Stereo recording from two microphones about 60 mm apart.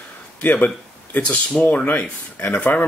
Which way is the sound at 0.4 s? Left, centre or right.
Left.